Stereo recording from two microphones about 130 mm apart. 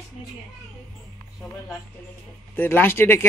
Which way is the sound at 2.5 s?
15° left (ahead or behind).